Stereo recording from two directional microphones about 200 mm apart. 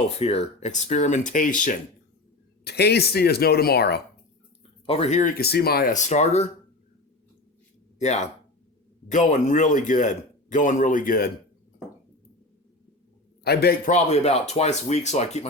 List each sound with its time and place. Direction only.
0.2 s a man's voice: 30° left (ahead or behind)
2.6 s speech: 55° left (ahead or behind)
4.9 s a man's voice: 30° left (ahead or behind)
7.9 s a man's voice: 35° left (ahead or behind)
13.4 s a man's voice: 50° left (ahead or behind); by 15.4 s 35° left (ahead or behind)